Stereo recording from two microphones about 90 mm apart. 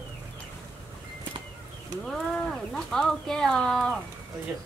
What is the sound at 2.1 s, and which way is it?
Speech, 5° left (ahead or behind).